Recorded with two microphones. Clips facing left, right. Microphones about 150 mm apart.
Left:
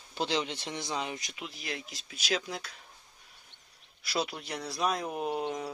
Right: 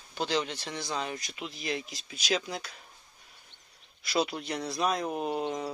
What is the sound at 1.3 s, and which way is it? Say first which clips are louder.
Speech: right 5 dB; 5° left (ahead or behind).